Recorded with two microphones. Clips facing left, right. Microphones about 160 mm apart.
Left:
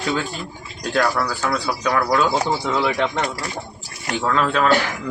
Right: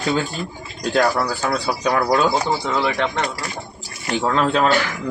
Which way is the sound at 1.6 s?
30° right (ahead or behind).